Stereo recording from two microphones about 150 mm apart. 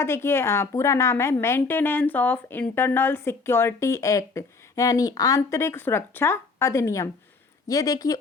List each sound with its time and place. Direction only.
0.0 s a woman's voice: 15° left (ahead or behind)